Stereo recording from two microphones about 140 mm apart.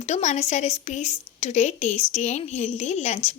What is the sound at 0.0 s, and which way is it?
A woman's voice, 55° left (ahead or behind).